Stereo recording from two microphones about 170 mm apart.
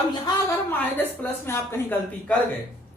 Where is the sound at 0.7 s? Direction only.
10° left (ahead or behind).